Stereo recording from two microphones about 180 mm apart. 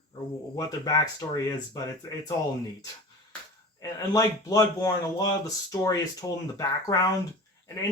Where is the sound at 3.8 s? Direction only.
20° left (ahead or behind).